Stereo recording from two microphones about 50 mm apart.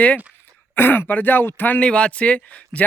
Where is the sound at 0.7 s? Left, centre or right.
Left.